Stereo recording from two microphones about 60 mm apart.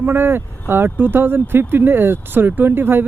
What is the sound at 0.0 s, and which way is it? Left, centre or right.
Speech, right.